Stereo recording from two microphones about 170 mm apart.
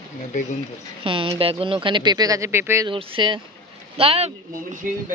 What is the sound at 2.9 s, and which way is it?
Speech, 30° right (ahead or behind).